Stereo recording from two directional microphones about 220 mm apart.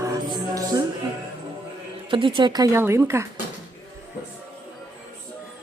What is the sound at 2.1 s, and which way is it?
A woman's voice, 20° right (ahead or behind).